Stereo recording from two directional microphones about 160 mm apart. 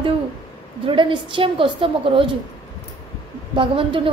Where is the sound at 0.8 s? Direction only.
30° right (ahead or behind).